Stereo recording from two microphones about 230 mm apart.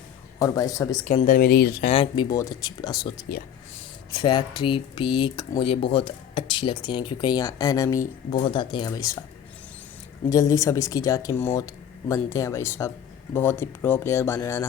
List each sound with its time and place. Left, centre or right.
0.3 s speech: centre
1.0 s speech: left
1.9 s speech: left
3.3 s speech: left
3.8 s speech: centre
10.2 s speech: centre